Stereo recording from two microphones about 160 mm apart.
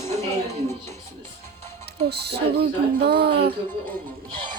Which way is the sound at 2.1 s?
90° right.